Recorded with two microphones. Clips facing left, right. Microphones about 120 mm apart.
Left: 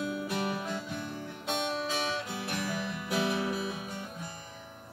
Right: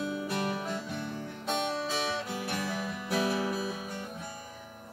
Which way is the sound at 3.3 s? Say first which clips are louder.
Right 1 dB; 30° right (ahead or behind).